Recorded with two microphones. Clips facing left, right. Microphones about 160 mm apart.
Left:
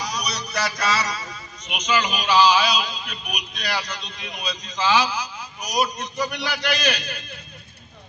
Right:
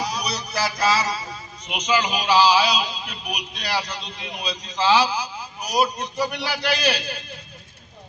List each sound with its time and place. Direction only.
0.0 s a man's voice: 25° right (ahead or behind)